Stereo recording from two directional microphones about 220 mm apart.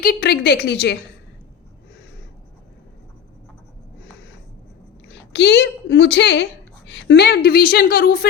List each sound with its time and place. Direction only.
0.0 s a woman's voice: 45° left (ahead or behind)
5.0 s a woman's voice: 50° left (ahead or behind)